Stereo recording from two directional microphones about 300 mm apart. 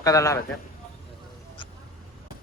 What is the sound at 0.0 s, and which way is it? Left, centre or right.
Speech, centre.